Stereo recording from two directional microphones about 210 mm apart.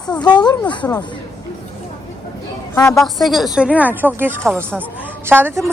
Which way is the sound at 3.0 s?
Centre (ahead or behind).